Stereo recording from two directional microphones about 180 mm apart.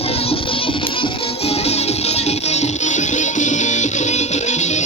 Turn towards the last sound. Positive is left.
turn(degrees=40)  # may be behind; listen again after turning